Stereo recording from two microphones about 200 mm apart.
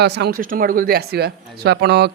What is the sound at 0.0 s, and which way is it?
Speech, 55° right (ahead or behind).